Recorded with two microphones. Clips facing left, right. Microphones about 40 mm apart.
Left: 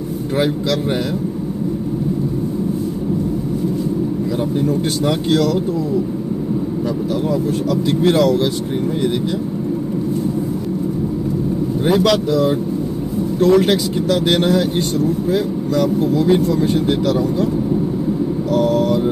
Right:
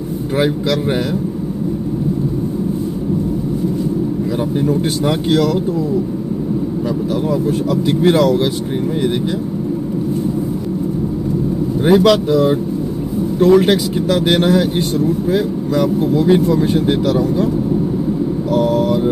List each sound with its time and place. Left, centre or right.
4.6 s speech: centre
7.7 s speech: centre
11.8 s speech: centre
18.5 s a sound: centre